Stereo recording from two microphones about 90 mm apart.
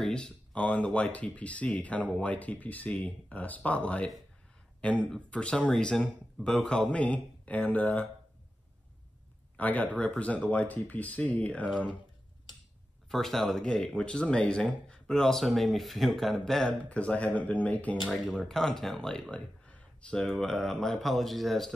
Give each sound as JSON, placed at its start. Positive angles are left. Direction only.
{"t": 0.0, "sound": "speech", "side_deg": 10}
{"t": 5.1, "sound": "speech", "side_deg": 10}
{"t": 9.6, "sound": "speech", "side_deg": 15}
{"t": 13.1, "sound": "speech", "side_deg": 5}
{"t": 18.1, "sound": "speech", "side_deg": 5}